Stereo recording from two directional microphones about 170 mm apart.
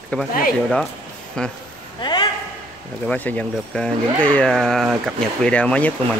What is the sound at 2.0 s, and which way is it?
Speech, 25° left (ahead or behind).